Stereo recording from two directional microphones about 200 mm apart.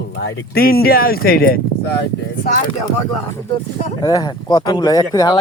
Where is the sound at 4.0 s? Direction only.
20° left (ahead or behind).